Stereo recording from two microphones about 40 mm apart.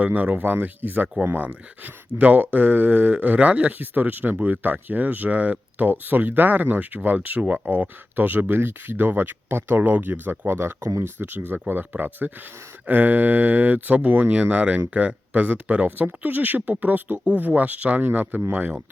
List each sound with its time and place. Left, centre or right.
0.0 s speech: right
1.8 s speech: right
3.8 s speech: right
11.3 s speech: right
14.5 s speech: right